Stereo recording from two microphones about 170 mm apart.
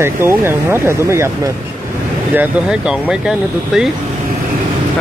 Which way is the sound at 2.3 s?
5° right (ahead or behind).